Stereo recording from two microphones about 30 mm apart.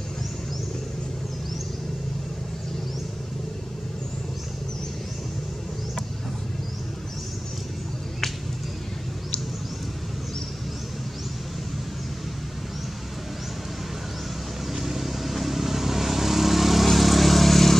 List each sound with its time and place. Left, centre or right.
14.7 s vehicle: centre